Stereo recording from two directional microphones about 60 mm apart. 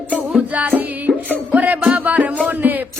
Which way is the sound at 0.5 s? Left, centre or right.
Right.